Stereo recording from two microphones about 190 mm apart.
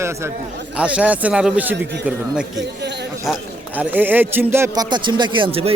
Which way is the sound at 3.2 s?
5° right (ahead or behind).